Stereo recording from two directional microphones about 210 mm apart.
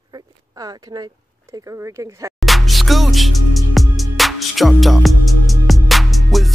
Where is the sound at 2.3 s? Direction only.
Centre (ahead or behind).